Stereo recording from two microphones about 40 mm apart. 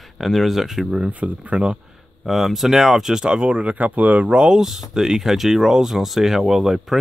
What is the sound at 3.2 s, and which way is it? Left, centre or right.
Speech, right.